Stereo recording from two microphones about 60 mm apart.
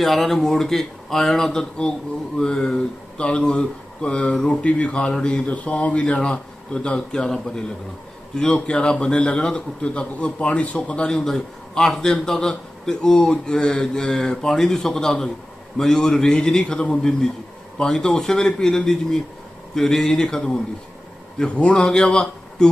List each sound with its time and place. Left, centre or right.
0.0 s speech: centre